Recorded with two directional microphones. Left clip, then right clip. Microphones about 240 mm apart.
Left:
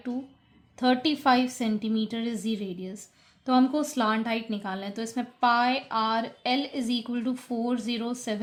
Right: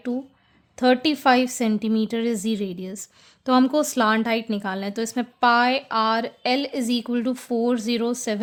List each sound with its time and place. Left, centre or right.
0.8 s speech: right